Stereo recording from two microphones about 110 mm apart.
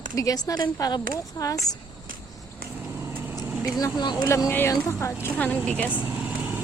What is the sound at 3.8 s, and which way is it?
Speech, 40° left (ahead or behind).